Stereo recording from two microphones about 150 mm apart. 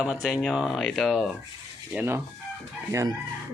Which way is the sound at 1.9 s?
10° right (ahead or behind).